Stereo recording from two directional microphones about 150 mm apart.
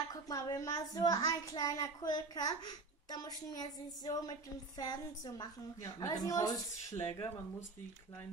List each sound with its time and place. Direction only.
0.1 s a woman's voice: 25° left (ahead or behind)